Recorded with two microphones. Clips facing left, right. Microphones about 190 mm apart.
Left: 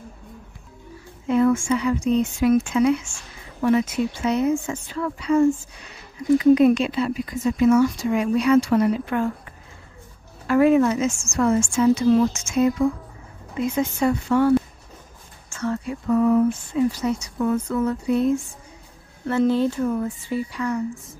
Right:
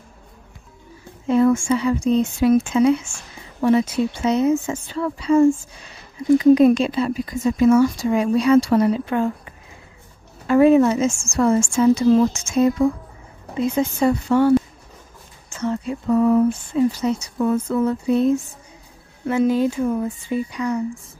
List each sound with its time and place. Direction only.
1.2 s a woman's voice: 30° right (ahead or behind)
10.4 s a woman's voice: 25° right (ahead or behind)
15.5 s a woman's voice: 20° right (ahead or behind)
19.2 s speech: 10° right (ahead or behind)